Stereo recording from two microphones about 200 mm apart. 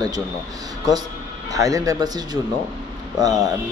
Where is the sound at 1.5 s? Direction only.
15° right (ahead or behind).